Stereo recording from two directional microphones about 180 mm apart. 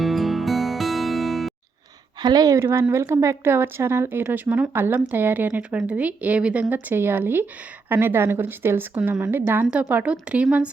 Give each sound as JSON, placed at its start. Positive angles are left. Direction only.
{"t": 0.0, "sound": "music", "side_deg": 0}
{"t": 2.2, "sound": "speech", "side_deg": -20}